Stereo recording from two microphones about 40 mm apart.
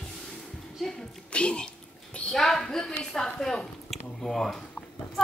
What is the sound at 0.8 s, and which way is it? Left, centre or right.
Music, centre.